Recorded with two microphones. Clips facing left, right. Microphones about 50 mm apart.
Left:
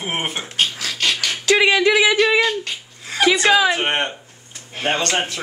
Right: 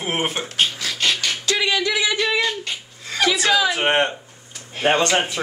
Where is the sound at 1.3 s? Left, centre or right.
Left.